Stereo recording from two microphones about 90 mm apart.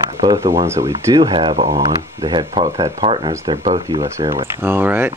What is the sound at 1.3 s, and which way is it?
Speech, 75° right (ahead or behind).